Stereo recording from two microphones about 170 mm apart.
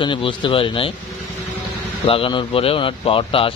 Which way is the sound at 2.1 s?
30° left (ahead or behind).